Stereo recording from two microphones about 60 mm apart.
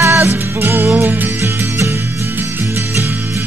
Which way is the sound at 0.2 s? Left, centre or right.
Right.